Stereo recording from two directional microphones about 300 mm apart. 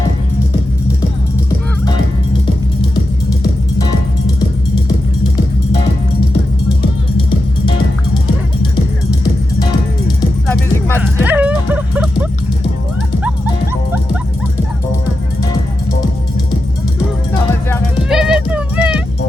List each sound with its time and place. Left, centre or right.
7.2 s music: centre
10.4 s music: centre
17.7 s music: centre